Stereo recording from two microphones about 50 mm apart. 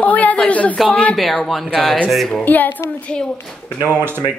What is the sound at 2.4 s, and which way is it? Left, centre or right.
Speech, left.